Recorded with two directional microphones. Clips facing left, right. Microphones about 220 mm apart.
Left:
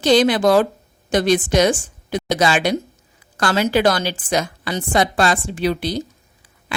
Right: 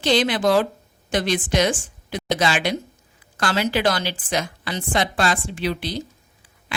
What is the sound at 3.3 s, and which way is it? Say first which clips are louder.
A woman's voice: left 4 dB; 40° left (ahead or behind).